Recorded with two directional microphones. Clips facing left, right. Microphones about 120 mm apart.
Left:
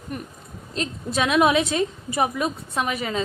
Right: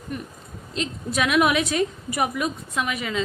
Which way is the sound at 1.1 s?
25° left (ahead or behind).